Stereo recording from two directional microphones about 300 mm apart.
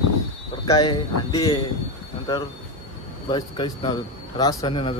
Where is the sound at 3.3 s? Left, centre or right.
Centre.